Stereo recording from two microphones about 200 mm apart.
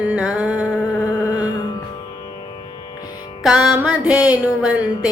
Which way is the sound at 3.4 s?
5° right (ahead or behind).